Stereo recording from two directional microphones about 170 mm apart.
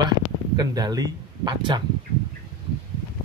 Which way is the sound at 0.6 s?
20° right (ahead or behind).